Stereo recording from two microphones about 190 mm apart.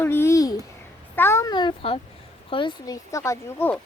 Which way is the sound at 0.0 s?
15° left (ahead or behind).